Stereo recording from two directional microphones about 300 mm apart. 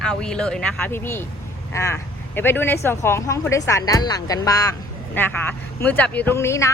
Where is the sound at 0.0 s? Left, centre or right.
Centre.